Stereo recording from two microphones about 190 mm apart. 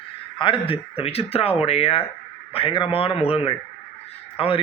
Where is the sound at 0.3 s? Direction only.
25° left (ahead or behind).